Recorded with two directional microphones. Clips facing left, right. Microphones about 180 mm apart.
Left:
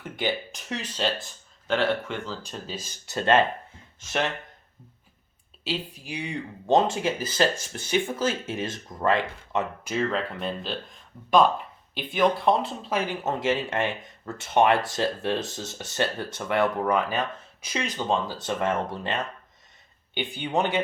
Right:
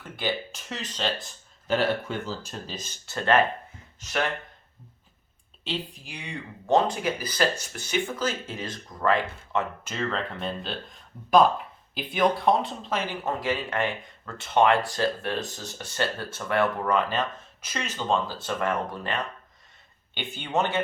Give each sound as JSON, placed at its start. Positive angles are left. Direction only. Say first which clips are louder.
{"t": 0.2, "sound": "speech", "louder": "left 1 dB", "side_deg": 15}
{"t": 1.6, "sound": "speech", "louder": "even", "side_deg": -10}
{"t": 2.7, "sound": "speech", "louder": "left 4 dB", "side_deg": 10}
{"t": 5.6, "sound": "speech", "louder": "left 2 dB", "side_deg": 10}
{"t": 13.0, "sound": "speech", "louder": "left 4 dB", "side_deg": 20}
{"t": 20.1, "sound": "speech", "louder": "left 1 dB", "side_deg": 15}